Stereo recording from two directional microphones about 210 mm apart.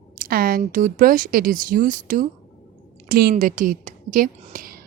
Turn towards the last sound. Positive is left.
turn(degrees=-40)  # may be behind; listen again after turning